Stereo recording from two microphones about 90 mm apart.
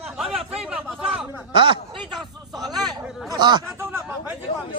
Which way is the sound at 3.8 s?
25° right (ahead or behind).